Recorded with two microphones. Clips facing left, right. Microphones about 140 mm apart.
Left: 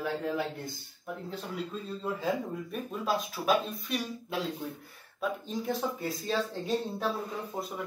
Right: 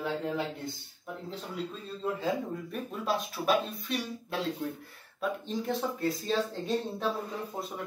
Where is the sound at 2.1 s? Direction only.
Centre (ahead or behind).